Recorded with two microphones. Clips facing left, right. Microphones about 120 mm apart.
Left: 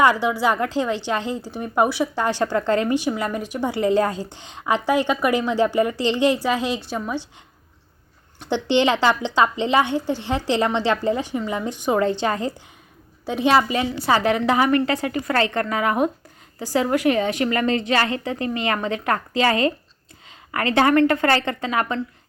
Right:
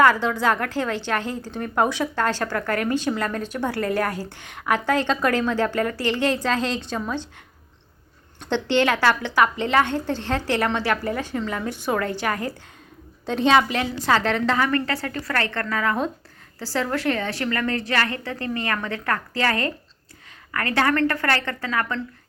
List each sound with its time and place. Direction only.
0.0 s a woman's voice: 15° left (ahead or behind)
8.4 s a woman's voice: 15° left (ahead or behind)
13.2 s a woman's voice: 10° left (ahead or behind)